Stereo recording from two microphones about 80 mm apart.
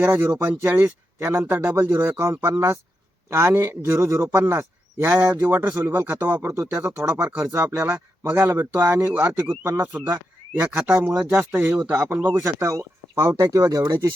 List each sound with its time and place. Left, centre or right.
0.0 s a man's voice: right
3.5 s a man's voice: right
6.8 s a man's voice: right
7.1 s speech: right
12.3 s a man's voice: right